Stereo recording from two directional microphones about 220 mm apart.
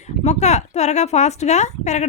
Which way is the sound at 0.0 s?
30° left (ahead or behind).